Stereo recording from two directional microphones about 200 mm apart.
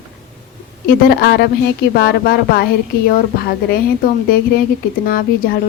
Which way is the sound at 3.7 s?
50° left (ahead or behind).